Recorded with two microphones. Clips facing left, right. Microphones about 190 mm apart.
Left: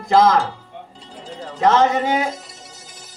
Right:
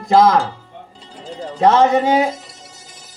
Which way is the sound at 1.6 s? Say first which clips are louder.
Right 3 dB; 30° right (ahead or behind).